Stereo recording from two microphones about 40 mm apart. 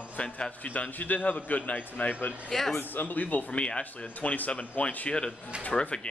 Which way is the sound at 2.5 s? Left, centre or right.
Centre.